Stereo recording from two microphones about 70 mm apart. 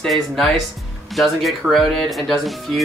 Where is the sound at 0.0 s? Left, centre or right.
Centre.